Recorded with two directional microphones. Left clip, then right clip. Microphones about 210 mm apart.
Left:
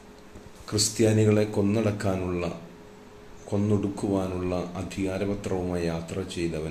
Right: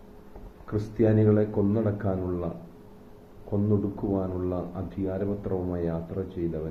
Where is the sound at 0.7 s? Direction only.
15° left (ahead or behind).